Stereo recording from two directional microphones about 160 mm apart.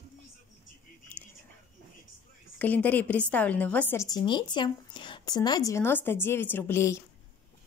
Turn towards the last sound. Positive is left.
turn(degrees=15)  # may be behind; listen again after turning